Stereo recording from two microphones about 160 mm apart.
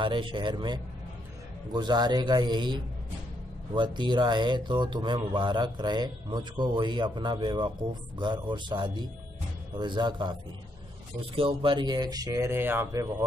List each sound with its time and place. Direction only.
0.0 s a man's voice: 30° right (ahead or behind)
11.3 s a man's voice: 30° right (ahead or behind); by 13.1 s 15° right (ahead or behind)